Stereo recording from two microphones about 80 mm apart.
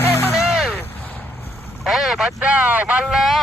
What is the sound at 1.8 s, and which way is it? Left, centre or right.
Speech, centre.